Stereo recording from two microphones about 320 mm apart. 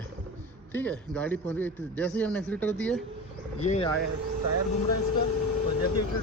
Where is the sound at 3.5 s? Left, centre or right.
Left.